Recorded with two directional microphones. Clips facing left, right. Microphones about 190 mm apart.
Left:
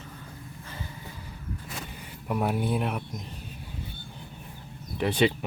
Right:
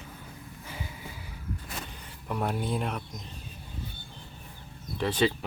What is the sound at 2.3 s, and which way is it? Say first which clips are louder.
Speech: left 3 dB; 10° left (ahead or behind).